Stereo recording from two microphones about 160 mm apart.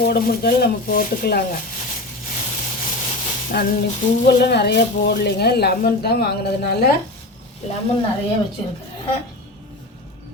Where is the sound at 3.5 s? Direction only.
85° left.